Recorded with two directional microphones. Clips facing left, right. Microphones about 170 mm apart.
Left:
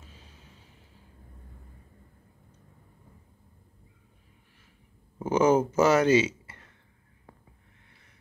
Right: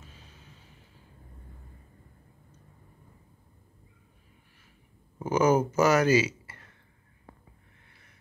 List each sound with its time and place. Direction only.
5.3 s speech: 25° left (ahead or behind)